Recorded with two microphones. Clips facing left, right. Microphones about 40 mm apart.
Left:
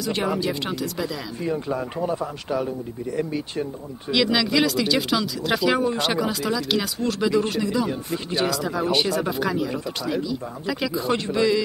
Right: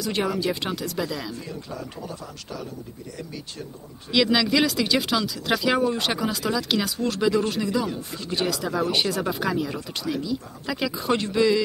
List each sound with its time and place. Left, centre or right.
0.0 s speech: centre
1.4 s speech: left
4.1 s speech: centre